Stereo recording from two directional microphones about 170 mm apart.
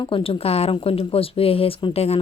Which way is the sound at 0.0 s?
30° left (ahead or behind).